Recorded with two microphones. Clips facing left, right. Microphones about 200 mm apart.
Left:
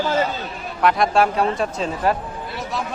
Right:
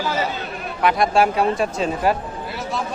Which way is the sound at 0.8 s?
5° right (ahead or behind).